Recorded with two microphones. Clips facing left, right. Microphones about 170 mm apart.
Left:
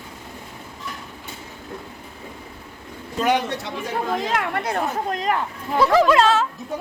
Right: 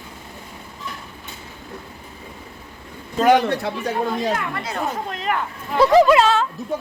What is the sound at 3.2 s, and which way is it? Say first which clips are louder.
Speech: right 6 dB; 50° right (ahead or behind).